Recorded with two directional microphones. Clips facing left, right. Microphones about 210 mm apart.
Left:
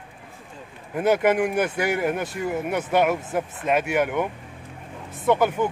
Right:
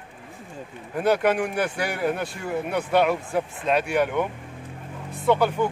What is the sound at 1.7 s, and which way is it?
Speech, 15° left (ahead or behind).